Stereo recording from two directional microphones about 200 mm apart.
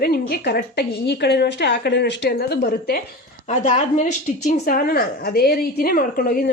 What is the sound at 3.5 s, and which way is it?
A woman's voice, 40° left (ahead or behind).